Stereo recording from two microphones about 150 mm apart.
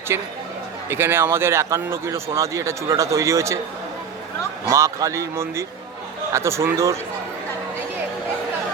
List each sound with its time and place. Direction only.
0.1 s speech: 15° right (ahead or behind)
4.7 s speech: 20° right (ahead or behind)